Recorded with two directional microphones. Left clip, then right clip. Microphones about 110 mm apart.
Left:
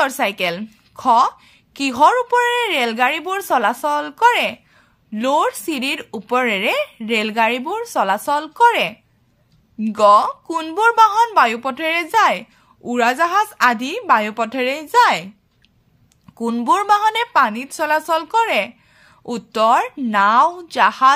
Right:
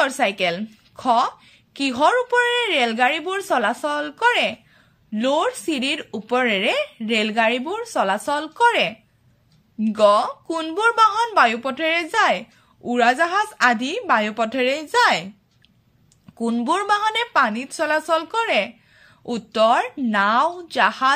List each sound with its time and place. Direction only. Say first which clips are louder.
0.0 s a woman's voice: left 1 dB; 40° left (ahead or behind)
16.3 s a woman's voice: left 5 dB; 40° left (ahead or behind)